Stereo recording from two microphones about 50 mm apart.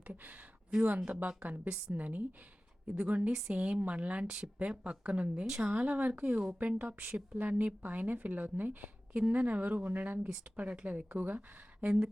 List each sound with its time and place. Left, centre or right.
0.1 s a woman's voice: right
9.1 s a woman's voice: right
11.9 s a woman's voice: centre